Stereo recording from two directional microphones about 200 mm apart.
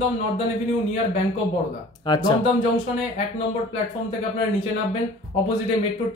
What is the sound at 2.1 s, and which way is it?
Speech, 20° left (ahead or behind).